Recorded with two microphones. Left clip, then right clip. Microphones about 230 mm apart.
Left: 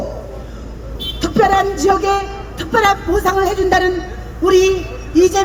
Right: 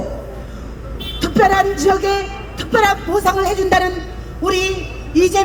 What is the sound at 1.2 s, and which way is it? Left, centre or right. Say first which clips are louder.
Music: even; right.